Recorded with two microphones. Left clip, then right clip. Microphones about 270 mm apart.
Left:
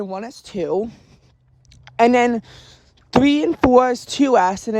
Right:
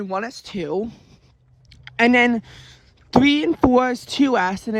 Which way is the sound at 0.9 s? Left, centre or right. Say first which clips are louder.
Even; left.